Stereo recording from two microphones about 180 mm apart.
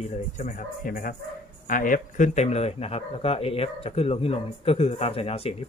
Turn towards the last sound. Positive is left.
turn(degrees=35)  # may be behind; listen again after turning